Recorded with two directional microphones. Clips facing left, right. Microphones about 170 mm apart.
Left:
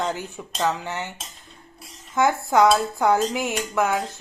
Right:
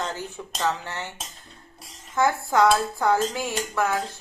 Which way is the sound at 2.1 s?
15° left (ahead or behind).